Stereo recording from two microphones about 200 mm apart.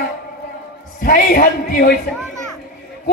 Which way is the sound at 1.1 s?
45° left (ahead or behind).